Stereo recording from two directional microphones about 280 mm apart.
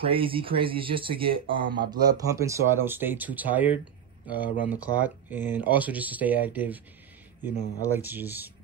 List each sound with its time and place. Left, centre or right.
0.0 s speech: centre